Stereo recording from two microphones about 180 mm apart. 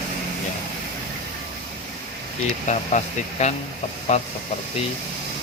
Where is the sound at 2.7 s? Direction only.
40° left (ahead or behind).